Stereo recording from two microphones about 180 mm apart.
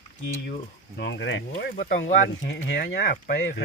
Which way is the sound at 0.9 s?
70° left (ahead or behind).